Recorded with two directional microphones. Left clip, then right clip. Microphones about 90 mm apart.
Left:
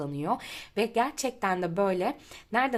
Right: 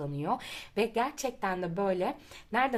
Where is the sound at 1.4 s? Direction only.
55° left (ahead or behind).